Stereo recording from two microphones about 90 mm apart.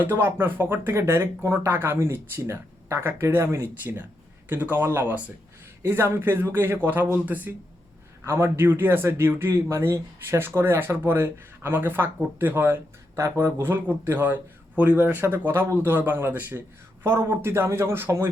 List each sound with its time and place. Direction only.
0.0 s a man's voice: 25° right (ahead or behind)
8.2 s a man's voice: 30° right (ahead or behind)